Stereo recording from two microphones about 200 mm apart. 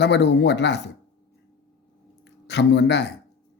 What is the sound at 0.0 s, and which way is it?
Speech, 60° left (ahead or behind).